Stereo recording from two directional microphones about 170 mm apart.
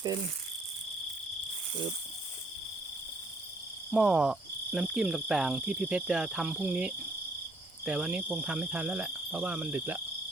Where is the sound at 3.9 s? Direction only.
5° right (ahead or behind).